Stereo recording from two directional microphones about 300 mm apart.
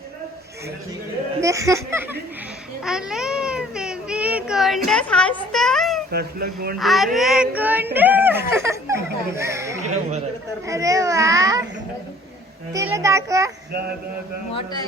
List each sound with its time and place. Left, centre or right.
1.4 s a child's voice: centre
2.8 s child singing: centre
4.9 s a sound: centre
6.1 s speech: right
6.7 s child singing: centre
7.9 s a child's voice: centre
9.8 s speech: right
10.7 s a child's voice: centre
12.7 s a child's voice: centre
14.5 s a man's voice: centre